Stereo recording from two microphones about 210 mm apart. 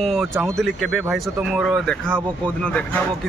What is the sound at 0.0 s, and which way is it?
Speech, centre (ahead or behind).